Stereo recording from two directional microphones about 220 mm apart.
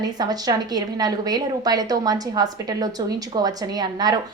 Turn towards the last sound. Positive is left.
turn(degrees=-20)  # may be behind; listen again after turning